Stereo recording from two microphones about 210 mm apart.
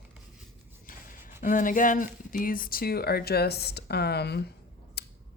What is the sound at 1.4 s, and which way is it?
Speech, 40° left (ahead or behind).